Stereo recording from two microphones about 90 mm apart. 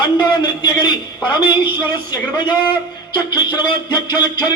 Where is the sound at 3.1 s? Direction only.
60° left (ahead or behind).